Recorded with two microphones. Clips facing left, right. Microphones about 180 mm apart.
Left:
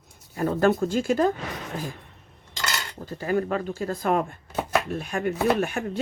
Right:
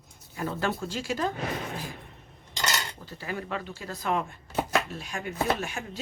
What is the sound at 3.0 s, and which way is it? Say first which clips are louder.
Speech: left 10 dB; 45° left (ahead or behind).